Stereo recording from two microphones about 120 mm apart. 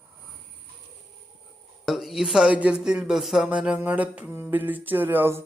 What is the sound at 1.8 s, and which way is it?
A woman's voice, centre (ahead or behind).